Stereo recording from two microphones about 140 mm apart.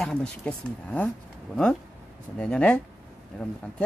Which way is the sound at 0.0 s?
5° left (ahead or behind).